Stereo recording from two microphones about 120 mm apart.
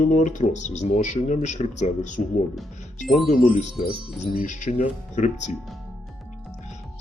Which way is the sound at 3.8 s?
90° left.